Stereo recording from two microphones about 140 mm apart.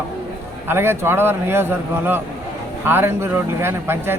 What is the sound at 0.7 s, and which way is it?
Speech, 15° right (ahead or behind).